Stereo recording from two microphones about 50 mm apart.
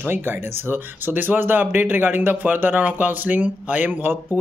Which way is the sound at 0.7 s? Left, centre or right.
Right.